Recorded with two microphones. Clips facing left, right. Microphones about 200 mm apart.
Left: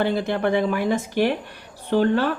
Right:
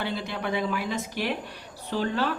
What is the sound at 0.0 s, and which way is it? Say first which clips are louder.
Speech: left 9 dB; 55° left (ahead or behind).